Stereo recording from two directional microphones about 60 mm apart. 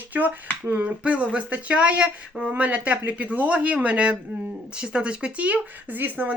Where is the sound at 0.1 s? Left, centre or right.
Right.